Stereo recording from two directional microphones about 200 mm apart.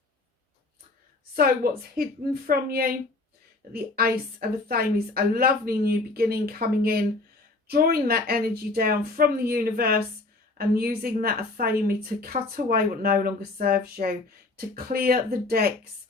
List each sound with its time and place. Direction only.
1.6 s a woman's voice: 50° right (ahead or behind)